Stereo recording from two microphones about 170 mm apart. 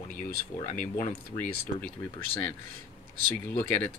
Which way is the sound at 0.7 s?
55° left (ahead or behind).